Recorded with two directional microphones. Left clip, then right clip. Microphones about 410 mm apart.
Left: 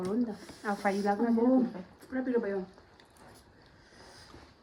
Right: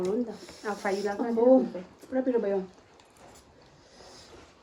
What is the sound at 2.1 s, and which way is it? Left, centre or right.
Speech, right.